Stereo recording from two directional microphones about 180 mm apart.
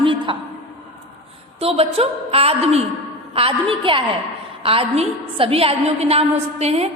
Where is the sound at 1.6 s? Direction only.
35° right (ahead or behind).